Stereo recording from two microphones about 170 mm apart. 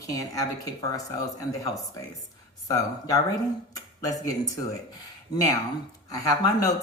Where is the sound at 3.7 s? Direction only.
20° left (ahead or behind).